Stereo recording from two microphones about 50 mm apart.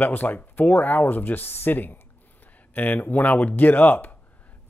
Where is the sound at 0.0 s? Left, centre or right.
Left.